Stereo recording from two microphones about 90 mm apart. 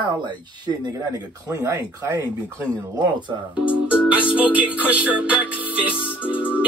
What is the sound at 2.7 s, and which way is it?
Speech, 55° right (ahead or behind).